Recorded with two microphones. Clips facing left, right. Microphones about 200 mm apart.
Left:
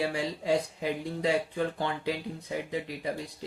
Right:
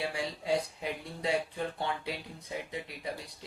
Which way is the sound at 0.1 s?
90° left.